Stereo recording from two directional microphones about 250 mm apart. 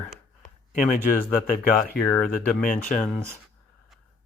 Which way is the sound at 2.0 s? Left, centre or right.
Centre.